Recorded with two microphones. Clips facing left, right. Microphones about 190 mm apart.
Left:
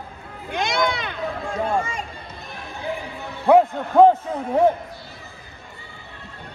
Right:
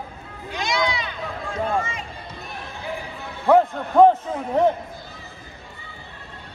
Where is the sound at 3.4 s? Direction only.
15° left (ahead or behind).